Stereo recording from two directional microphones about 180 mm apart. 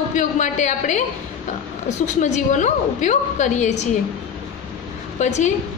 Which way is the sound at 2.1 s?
40° left (ahead or behind).